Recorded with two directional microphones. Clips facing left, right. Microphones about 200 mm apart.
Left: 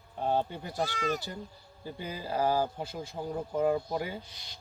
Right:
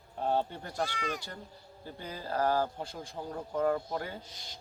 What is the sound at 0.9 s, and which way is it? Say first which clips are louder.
Speech: left 5 dB; 40° left (ahead or behind).